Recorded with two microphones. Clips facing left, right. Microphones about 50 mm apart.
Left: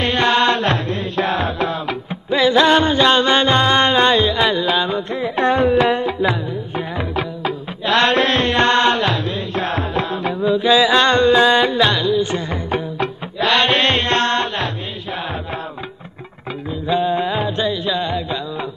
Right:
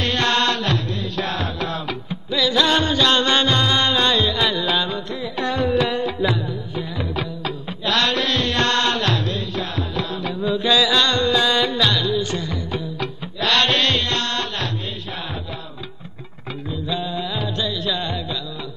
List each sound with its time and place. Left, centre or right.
0.0 s music: centre
2.7 s music: left
3.5 s music: left
4.8 s music: left
7.2 s music: left
9.6 s music: left
10.4 s music: centre
10.8 s music: left
13.4 s music: centre
13.7 s music: left
16.8 s music: left
17.9 s music: centre